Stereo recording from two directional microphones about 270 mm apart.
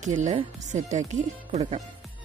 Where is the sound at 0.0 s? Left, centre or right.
Right.